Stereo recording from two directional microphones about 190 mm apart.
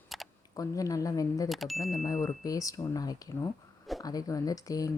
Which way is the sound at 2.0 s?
15° left (ahead or behind).